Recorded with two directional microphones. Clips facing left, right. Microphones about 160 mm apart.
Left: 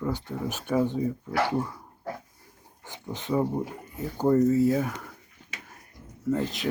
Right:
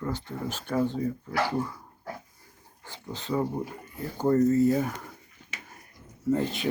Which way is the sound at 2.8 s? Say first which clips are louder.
Left 2 dB; 15° left (ahead or behind).